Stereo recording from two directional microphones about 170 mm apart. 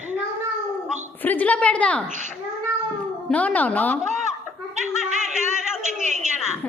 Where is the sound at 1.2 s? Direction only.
10° left (ahead or behind).